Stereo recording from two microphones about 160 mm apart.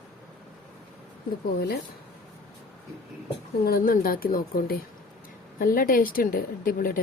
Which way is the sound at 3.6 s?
65° left (ahead or behind).